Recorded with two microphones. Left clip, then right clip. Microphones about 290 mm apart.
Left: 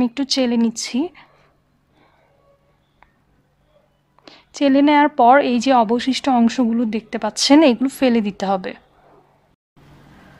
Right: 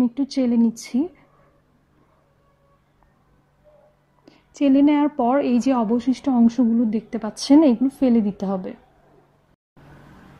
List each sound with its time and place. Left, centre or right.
0.2 s speech: left
4.2 s a woman's voice: left